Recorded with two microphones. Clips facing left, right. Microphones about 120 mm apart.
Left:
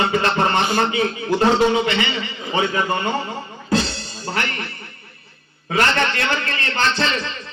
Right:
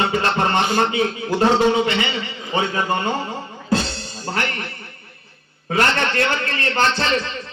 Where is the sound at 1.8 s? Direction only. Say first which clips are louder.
Even; 35° right (ahead or behind).